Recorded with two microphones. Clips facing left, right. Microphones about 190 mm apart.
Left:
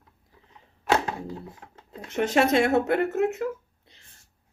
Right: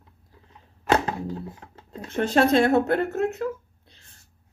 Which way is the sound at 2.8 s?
20° left (ahead or behind).